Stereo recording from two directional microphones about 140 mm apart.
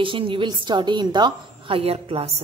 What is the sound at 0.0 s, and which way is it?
A woman's voice, 35° right (ahead or behind).